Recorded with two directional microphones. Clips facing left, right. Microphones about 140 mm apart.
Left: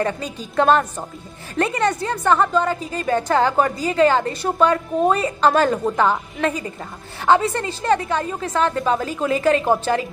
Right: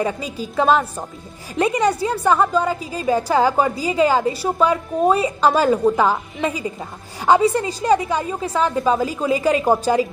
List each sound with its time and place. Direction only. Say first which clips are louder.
0.0 s a woman's voice: right 1 dB; 5° right (ahead or behind)